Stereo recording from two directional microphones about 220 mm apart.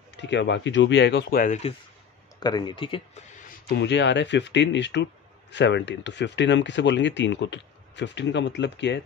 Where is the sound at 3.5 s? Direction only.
50° left (ahead or behind).